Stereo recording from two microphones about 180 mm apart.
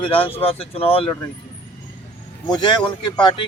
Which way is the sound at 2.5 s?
25° left (ahead or behind).